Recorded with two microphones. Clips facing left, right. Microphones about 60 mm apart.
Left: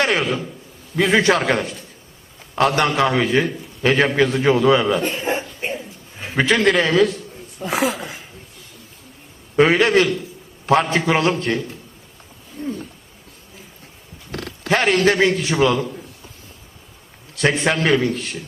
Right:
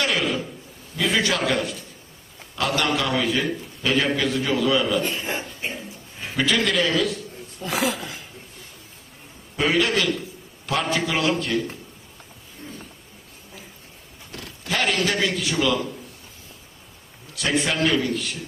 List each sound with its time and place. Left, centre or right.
0.0 s a sound: left
0.9 s a man's voice: left
9.6 s a man's voice: left
14.3 s a sound: left
14.7 s a man's voice: left
17.4 s a man's voice: left